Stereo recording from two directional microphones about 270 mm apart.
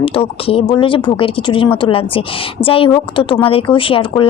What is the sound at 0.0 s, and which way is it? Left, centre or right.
Speech, centre.